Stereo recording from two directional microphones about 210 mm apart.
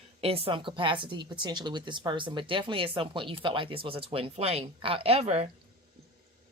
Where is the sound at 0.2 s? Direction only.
25° right (ahead or behind).